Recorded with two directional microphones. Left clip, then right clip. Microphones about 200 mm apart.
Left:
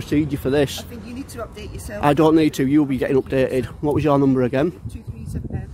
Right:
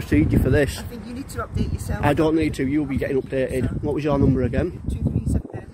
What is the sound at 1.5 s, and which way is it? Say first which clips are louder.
Speech: right 1 dB; 25° left (ahead or behind).